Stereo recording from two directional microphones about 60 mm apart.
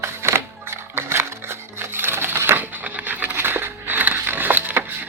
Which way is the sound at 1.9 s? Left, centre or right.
Right.